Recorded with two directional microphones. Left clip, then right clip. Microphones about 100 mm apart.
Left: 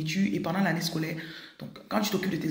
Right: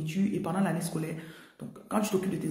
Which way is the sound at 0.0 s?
30° right (ahead or behind).